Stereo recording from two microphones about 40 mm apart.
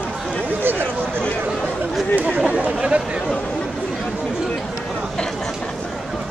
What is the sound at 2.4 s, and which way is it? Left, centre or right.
Speech, right.